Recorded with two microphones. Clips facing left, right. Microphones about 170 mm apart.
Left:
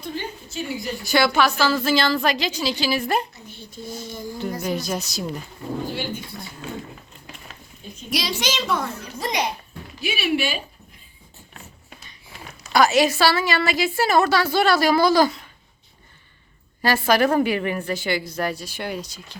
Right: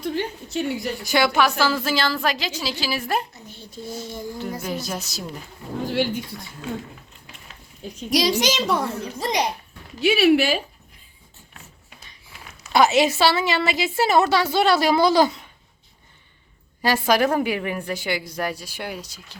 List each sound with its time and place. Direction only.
0.0 s a sound: 70° right (ahead or behind)
1.0 s a woman's voice: 15° right (ahead or behind)
3.5 s child singing: 35° right (ahead or behind)
4.6 s a woman's voice: 5° right (ahead or behind)
5.8 s speech: 90° right
7.8 s a woman's voice: 80° right
8.1 s a child's voice: 40° right (ahead or behind)
10.0 s speech: 75° right (ahead or behind)
12.7 s a woman's voice: 20° right (ahead or behind)
16.8 s a woman's voice: 15° right (ahead or behind)